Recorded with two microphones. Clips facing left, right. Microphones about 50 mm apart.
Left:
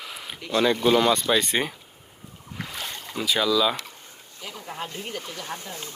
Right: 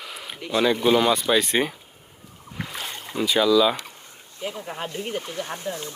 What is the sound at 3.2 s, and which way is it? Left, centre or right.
Speech, centre.